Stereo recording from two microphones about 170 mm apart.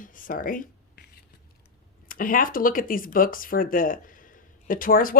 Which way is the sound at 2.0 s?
55° left (ahead or behind).